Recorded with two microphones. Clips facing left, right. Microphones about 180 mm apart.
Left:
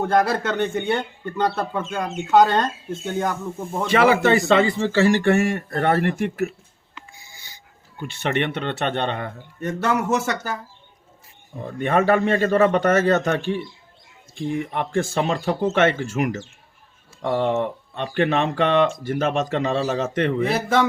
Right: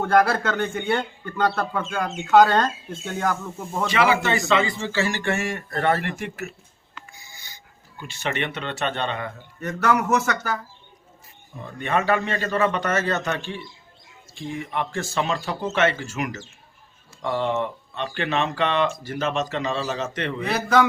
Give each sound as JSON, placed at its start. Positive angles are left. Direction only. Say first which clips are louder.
{"t": 0.0, "sound": "speech", "louder": "even", "side_deg": 20}
{"t": 3.9, "sound": "a man's voice", "louder": "left 5 dB", "side_deg": 55}
{"t": 7.9, "sound": "speech", "louder": "left 4 dB", "side_deg": 60}
{"t": 9.6, "sound": "speech", "louder": "even", "side_deg": 25}
{"t": 11.8, "sound": "a man's voice", "louder": "left 4 dB", "side_deg": 50}
{"t": 20.4, "sound": "speech", "louder": "right 3 dB", "side_deg": 25}